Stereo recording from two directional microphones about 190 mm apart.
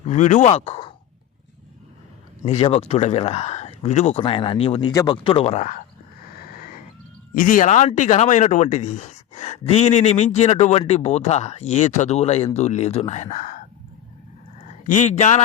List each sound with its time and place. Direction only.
0.1 s speech: 40° left (ahead or behind)
2.4 s speech: 35° left (ahead or behind)
7.3 s speech: 45° left (ahead or behind)
14.8 s speech: 40° left (ahead or behind)